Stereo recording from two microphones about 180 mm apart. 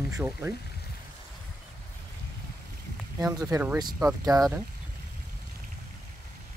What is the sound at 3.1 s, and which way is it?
Speech, 20° right (ahead or behind).